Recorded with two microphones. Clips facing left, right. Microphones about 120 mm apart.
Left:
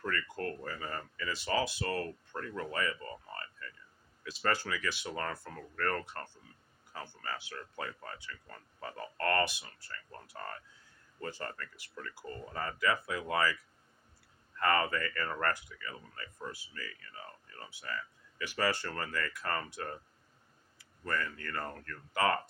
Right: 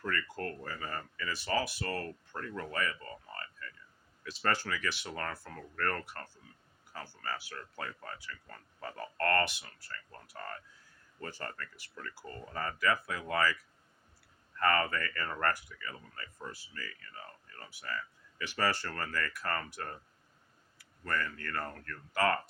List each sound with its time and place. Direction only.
0.0 s a sound: 20° left (ahead or behind)
0.4 s speech: 20° left (ahead or behind)
4.3 s speech: 15° left (ahead or behind)
9.8 s speech: 30° left (ahead or behind)
11.3 s speech: 15° left (ahead or behind)
14.6 s speech: 25° left (ahead or behind)